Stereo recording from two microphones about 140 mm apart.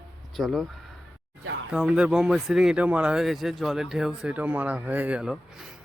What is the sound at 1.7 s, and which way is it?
Speech, 10° right (ahead or behind).